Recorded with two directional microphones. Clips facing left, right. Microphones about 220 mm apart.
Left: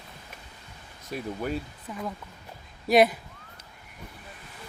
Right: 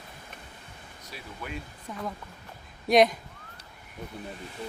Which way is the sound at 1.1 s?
40° left (ahead or behind).